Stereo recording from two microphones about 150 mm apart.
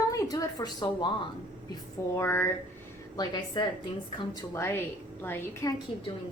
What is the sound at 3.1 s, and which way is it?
Speech, 30° left (ahead or behind).